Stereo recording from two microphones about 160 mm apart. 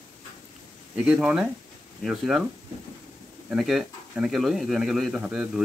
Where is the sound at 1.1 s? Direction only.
5° right (ahead or behind).